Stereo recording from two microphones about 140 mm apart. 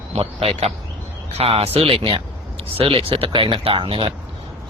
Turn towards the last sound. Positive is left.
turn(degrees=-40)  # may be behind; listen again after turning